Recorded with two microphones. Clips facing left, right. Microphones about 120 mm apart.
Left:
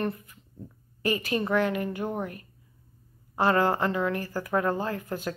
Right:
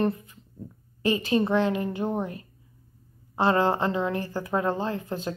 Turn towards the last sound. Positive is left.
turn(degrees=-25)  # may be behind; listen again after turning